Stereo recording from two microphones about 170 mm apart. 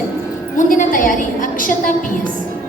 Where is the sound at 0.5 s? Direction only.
50° left (ahead or behind).